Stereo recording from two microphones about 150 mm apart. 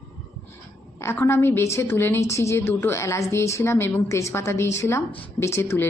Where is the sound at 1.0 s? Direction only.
15° left (ahead or behind).